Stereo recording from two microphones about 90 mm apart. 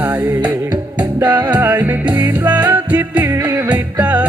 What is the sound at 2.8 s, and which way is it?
Music, 15° right (ahead or behind).